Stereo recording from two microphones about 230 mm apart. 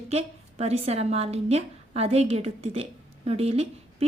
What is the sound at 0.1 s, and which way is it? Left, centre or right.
A woman's voice, right.